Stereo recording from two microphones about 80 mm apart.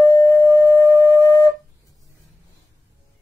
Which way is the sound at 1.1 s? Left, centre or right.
Left.